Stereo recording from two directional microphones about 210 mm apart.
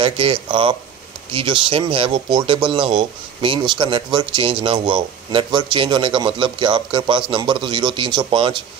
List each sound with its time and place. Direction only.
0.0 s speech: 25° right (ahead or behind)